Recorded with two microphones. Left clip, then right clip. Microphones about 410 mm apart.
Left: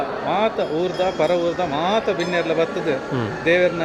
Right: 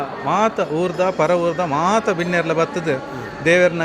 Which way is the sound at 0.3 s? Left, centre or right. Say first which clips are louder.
Right 3 dB; right.